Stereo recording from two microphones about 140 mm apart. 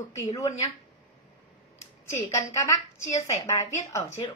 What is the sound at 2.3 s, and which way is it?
A woman's voice, 20° left (ahead or behind).